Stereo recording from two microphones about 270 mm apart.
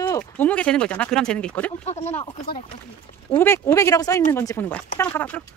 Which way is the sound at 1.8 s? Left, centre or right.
Left.